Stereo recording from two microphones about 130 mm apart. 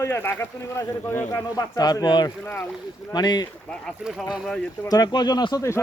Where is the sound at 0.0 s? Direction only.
20° left (ahead or behind).